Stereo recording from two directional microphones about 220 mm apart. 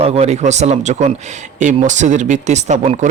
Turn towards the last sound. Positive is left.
turn(degrees=-30)  # may be behind; listen again after turning